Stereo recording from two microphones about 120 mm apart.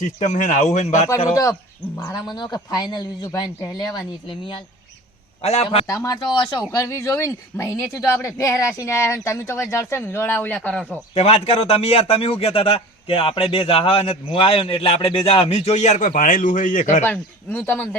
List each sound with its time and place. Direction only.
0.0 s speech: 90° left
1.3 s speech: 30° left (ahead or behind)
5.4 s a man's voice: 65° left (ahead or behind)
5.9 s speech: 30° left (ahead or behind); by 10.8 s 10° left (ahead or behind)
11.1 s a man's voice: 60° left (ahead or behind); by 17.0 s 90° left
17.0 s speech: 15° left (ahead or behind)